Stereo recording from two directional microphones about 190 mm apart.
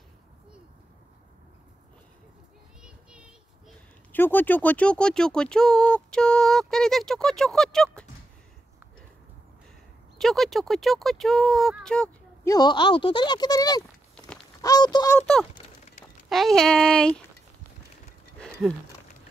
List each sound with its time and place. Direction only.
2.8 s a sound: 5° right (ahead or behind)
4.1 s speech: 10° left (ahead or behind)
10.1 s speech: centre (ahead or behind)
12.4 s speech: 20° left (ahead or behind)
14.1 s walk: 5° left (ahead or behind)
14.6 s speech: 20° left (ahead or behind)
15.1 s speech: 5° left (ahead or behind)